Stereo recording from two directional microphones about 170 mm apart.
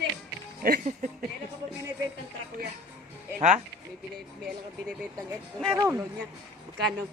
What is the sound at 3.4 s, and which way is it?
Music, 45° right (ahead or behind).